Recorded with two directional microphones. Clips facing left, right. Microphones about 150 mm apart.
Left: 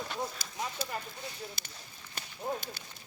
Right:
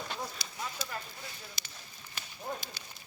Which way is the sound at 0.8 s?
55° left (ahead or behind).